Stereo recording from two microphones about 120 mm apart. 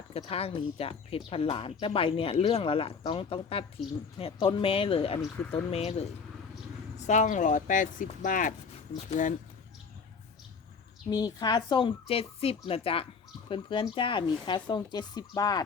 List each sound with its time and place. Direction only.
0.1 s speech: 55° left (ahead or behind)
6.9 s speech: 80° left
11.1 s speech: 35° left (ahead or behind)